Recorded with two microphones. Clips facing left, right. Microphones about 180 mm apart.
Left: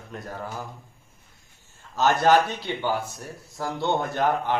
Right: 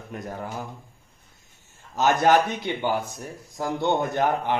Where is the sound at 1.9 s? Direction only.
15° right (ahead or behind).